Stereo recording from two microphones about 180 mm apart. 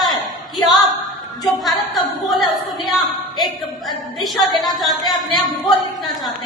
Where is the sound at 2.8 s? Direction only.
Centre (ahead or behind).